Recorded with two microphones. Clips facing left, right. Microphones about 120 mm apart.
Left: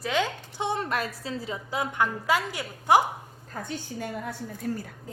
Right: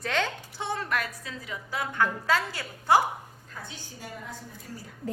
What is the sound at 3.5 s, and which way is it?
A woman's voice, 50° left (ahead or behind).